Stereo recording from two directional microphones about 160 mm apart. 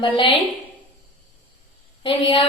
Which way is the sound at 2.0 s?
35° left (ahead or behind).